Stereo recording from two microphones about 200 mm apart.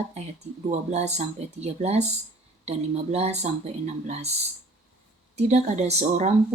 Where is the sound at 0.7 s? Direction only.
35° right (ahead or behind).